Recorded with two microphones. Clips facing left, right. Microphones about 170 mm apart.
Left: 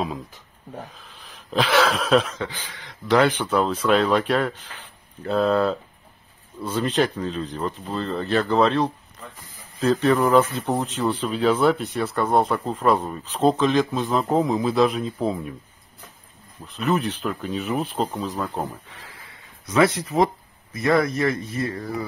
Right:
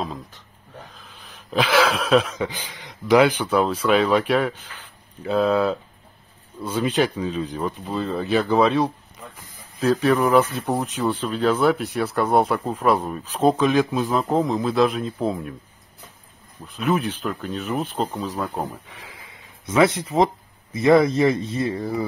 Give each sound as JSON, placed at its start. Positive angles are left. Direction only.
{"t": 0.9, "sound": "a sound", "side_deg": 0}
{"t": 2.3, "sound": "a man's voice", "side_deg": -10}
{"t": 16.6, "sound": "a man's voice", "side_deg": 0}